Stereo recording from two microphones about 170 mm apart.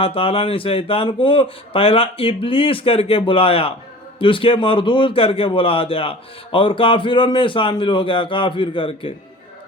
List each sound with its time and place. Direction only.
0.0 s a man's voice: 35° left (ahead or behind)